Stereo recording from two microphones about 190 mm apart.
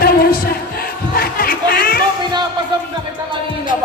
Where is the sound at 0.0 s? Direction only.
50° left (ahead or behind).